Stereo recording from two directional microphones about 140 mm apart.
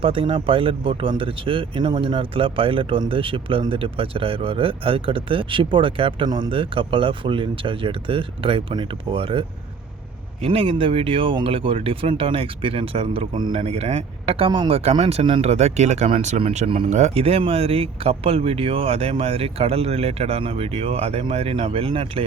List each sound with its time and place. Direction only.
0.0 s speech: 40° right (ahead or behind)
10.4 s speech: 40° right (ahead or behind)